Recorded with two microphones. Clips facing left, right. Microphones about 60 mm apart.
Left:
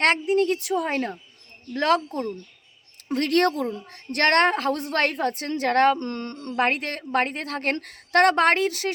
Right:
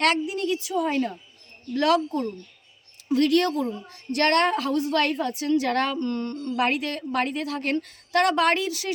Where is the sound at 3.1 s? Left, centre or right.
Left.